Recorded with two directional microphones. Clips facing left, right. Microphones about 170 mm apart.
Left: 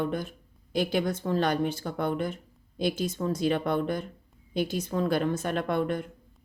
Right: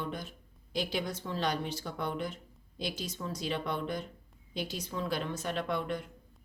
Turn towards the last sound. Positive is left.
turn(degrees=50)  # may be behind; listen again after turning